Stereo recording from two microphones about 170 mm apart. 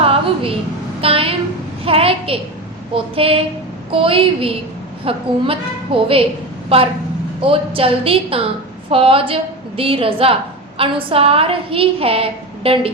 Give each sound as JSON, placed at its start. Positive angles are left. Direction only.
{"t": 0.0, "sound": "a sound", "side_deg": -35}
{"t": 1.0, "sound": "a woman's voice", "side_deg": -35}
{"t": 7.4, "sound": "a woman's voice", "side_deg": -30}